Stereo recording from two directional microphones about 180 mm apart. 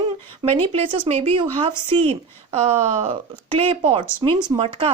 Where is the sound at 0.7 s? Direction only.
35° right (ahead or behind).